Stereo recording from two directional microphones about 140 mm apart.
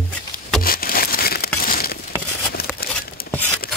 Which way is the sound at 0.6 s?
90° left.